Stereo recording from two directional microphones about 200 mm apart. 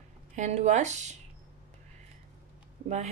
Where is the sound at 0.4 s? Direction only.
35° right (ahead or behind).